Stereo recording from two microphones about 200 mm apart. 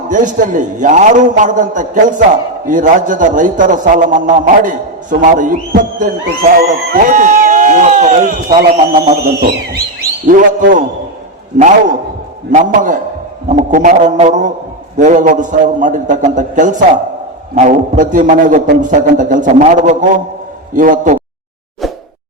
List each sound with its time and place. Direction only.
0.1 s a man's voice: 40° right (ahead or behind)
12.5 s a man's voice: 40° right (ahead or behind)